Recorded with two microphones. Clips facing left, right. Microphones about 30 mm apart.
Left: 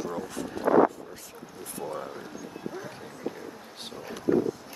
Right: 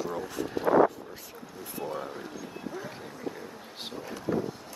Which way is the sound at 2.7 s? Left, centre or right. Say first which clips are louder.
Even; centre.